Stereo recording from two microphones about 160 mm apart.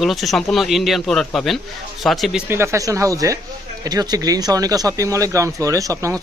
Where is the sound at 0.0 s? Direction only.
Centre (ahead or behind).